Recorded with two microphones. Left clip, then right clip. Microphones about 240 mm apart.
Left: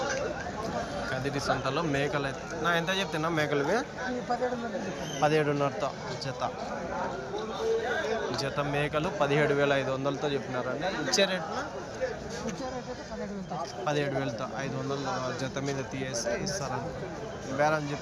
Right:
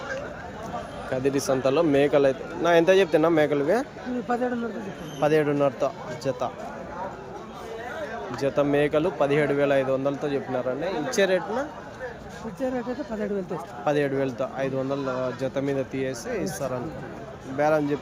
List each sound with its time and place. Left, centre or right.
1.1 s speech: right
5.2 s speech: right
8.4 s speech: right
13.8 s speech: right